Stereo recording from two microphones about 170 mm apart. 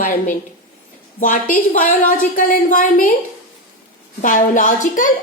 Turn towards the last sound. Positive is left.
turn(degrees=50)  # may be behind; listen again after turning